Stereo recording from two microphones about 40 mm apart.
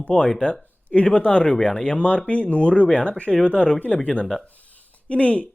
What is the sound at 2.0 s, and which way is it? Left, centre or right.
Speech, left.